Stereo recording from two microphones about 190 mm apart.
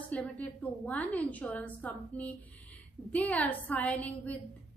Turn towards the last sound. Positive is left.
turn(degrees=10)  # may be behind; listen again after turning